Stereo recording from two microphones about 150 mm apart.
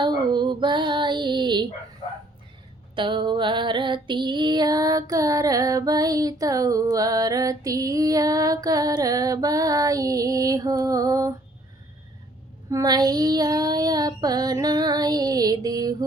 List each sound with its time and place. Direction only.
0.0 s female singing: 30° right (ahead or behind)
2.9 s female singing: 30° right (ahead or behind)
12.7 s female singing: 25° right (ahead or behind)